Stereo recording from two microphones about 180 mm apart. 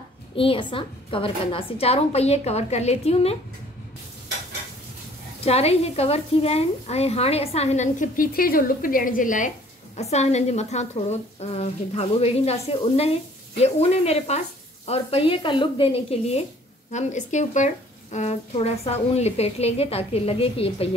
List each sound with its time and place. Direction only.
0.4 s a woman's voice: 30° left (ahead or behind)
5.4 s a woman's voice: 35° left (ahead or behind)